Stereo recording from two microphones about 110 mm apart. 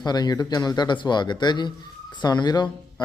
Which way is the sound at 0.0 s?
40° left (ahead or behind).